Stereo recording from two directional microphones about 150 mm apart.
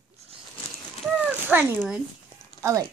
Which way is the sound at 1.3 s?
10° right (ahead or behind).